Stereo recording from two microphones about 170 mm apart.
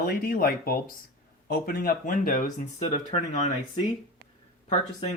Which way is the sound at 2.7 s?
40° left (ahead or behind).